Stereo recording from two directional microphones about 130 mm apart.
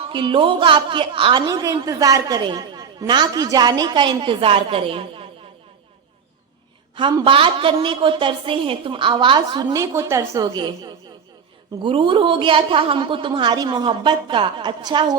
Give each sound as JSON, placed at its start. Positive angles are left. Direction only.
{"t": 0.0, "sound": "a woman's voice", "side_deg": -40}
{"t": 6.9, "sound": "a woman's voice", "side_deg": -40}